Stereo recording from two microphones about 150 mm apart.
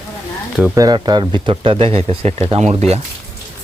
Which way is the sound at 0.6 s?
20° right (ahead or behind).